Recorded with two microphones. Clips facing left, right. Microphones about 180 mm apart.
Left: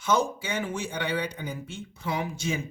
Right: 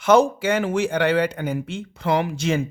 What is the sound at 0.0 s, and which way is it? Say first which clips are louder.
Speech: right 10 dB; 80° right.